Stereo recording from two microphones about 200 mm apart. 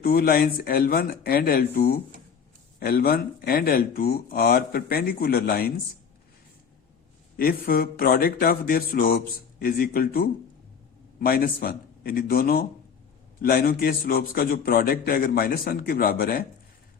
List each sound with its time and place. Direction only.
0.0 s a man's voice: 50° left (ahead or behind)
7.3 s a man's voice: 50° left (ahead or behind)